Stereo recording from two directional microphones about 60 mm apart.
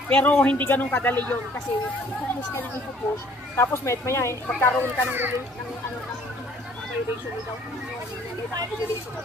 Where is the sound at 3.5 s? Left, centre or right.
Left.